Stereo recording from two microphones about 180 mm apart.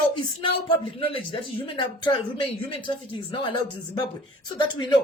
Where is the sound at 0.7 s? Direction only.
30° left (ahead or behind).